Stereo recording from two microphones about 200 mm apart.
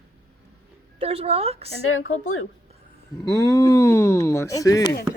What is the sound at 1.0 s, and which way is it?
Speech, 30° right (ahead or behind).